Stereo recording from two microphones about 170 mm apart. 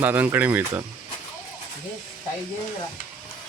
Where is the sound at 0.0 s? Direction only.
10° right (ahead or behind).